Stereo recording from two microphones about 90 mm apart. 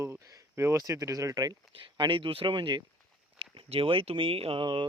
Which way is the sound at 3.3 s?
75° right (ahead or behind).